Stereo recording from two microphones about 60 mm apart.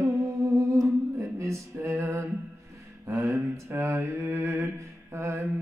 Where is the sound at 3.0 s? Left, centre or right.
Right.